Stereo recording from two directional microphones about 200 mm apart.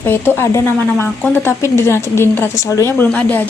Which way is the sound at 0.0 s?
10° left (ahead or behind).